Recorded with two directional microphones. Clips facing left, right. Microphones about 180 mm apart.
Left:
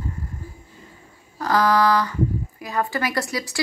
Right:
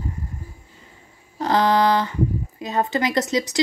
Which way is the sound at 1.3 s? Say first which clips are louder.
Right 1 dB; 25° right (ahead or behind).